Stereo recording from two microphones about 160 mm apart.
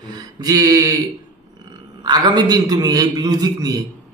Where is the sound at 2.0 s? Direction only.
25° right (ahead or behind).